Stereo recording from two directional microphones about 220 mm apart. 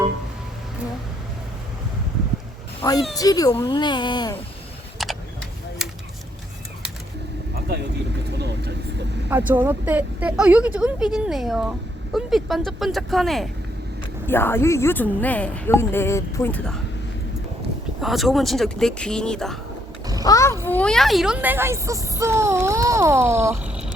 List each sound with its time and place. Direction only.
2.8 s a woman's voice: 15° left (ahead or behind)
5.0 s vehicle: centre (ahead or behind)
5.8 s a sound: 5° right (ahead or behind)
8.3 s vehicle: 50° right (ahead or behind)
9.3 s a woman's voice: 10° right (ahead or behind); by 16.7 s 5° left (ahead or behind)
18.0 s a woman's voice: centre (ahead or behind)
20.2 s a woman's voice: 15° left (ahead or behind); by 23.9 s 5° right (ahead or behind)